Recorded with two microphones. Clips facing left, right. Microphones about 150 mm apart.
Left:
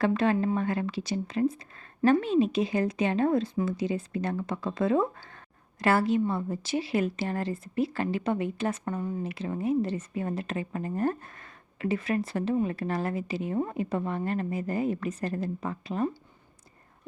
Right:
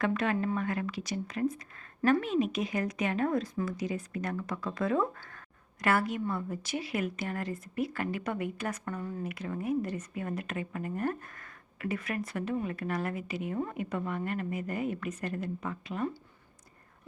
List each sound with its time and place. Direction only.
0.0 s a woman's voice: 30° left (ahead or behind)